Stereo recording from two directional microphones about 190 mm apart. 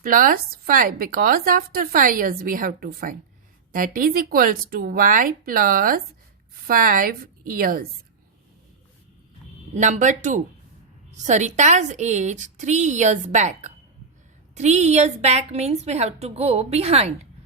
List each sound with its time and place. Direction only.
0.0 s a woman's voice: 45° right (ahead or behind)
9.7 s a woman's voice: 40° right (ahead or behind)